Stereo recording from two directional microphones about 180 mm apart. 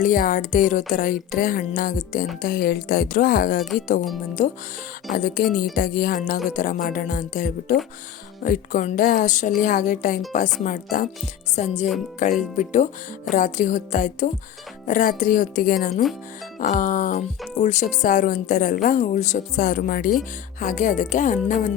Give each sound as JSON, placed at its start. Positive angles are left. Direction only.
{"t": 0.0, "sound": "a woman's voice", "side_deg": 45}
{"t": 5.1, "sound": "a woman's voice", "side_deg": 50}
{"t": 11.5, "sound": "a woman's voice", "side_deg": 40}